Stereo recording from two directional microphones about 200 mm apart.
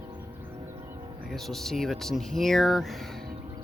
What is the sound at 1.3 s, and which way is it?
Speech, centre (ahead or behind).